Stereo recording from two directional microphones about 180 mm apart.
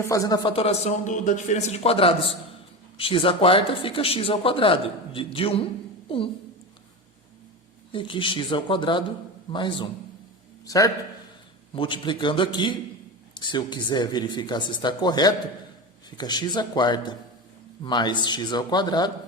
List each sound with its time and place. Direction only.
0.0 s speech: 20° left (ahead or behind)
0.5 s a man's voice: 35° left (ahead or behind)
7.9 s speech: 30° left (ahead or behind)